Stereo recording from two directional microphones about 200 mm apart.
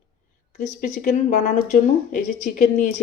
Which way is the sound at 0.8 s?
40° left (ahead or behind).